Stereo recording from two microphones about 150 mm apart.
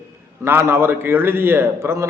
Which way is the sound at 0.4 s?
15° right (ahead or behind).